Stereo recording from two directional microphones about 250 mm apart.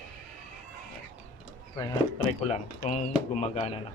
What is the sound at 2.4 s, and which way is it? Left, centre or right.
A man's voice, left.